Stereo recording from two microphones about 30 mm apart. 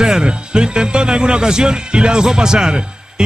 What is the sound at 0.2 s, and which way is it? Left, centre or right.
A man's voice, right.